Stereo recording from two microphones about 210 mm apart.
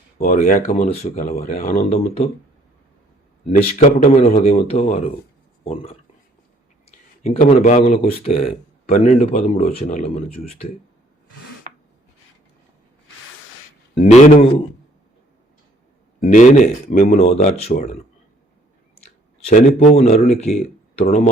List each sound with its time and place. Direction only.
0.2 s speech: 40° left (ahead or behind)
3.4 s speech: 35° left (ahead or behind)
7.2 s speech: 35° left (ahead or behind)
13.9 s speech: 35° left (ahead or behind)
16.2 s speech: 35° left (ahead or behind)
19.5 s speech: 35° left (ahead or behind)